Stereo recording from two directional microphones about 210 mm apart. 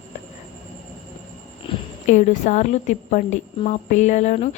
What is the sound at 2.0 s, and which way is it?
A woman's voice, 35° left (ahead or behind).